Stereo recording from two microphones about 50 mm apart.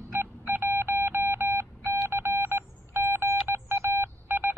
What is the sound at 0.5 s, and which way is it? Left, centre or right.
Telephone dialing, right.